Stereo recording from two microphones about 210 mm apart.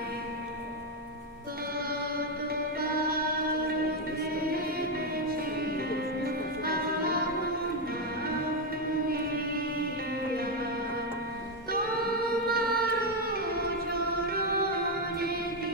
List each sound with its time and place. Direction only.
2.1 s music: 45° right (ahead or behind)
5.1 s music: 45° right (ahead or behind)
9.1 s music: 45° right (ahead or behind)
12.3 s music: 45° right (ahead or behind)